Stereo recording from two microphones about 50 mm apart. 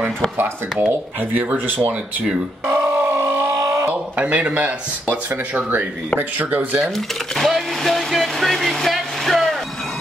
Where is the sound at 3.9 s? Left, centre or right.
Right.